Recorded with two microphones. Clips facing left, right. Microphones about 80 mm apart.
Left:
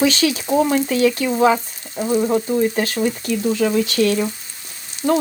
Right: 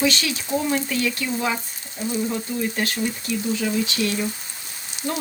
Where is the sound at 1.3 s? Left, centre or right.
Left.